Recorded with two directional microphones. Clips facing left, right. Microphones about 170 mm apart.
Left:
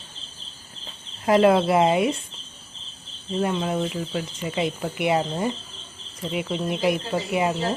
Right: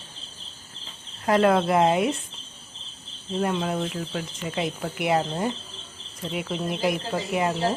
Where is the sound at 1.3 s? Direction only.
10° left (ahead or behind).